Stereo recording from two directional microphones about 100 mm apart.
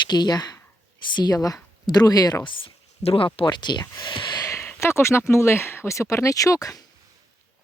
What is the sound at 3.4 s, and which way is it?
Speech, 50° left (ahead or behind).